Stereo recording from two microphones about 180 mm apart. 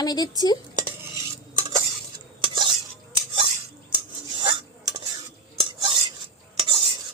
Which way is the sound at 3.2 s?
30° right (ahead or behind).